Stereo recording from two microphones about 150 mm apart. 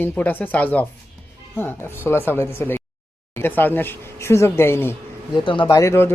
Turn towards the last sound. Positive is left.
turn(degrees=20)  # may be behind; listen again after turning